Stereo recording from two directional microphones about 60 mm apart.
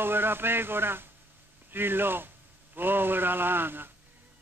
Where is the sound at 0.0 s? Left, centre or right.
Right.